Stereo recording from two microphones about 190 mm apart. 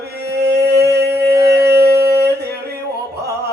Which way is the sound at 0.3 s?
60° right (ahead or behind).